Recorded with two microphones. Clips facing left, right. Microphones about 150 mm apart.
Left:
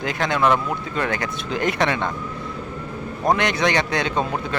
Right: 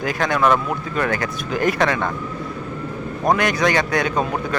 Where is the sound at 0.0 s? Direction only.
20° left (ahead or behind).